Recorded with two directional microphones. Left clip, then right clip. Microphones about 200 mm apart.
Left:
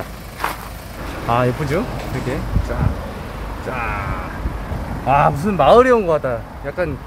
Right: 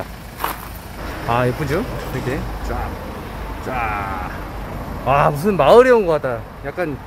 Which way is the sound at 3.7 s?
10° right (ahead or behind).